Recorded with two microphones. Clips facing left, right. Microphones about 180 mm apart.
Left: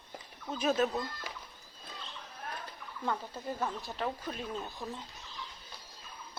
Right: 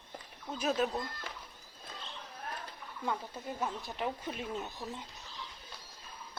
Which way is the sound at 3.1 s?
Centre (ahead or behind).